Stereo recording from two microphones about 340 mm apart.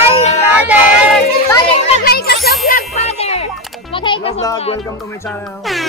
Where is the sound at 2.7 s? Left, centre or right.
Centre.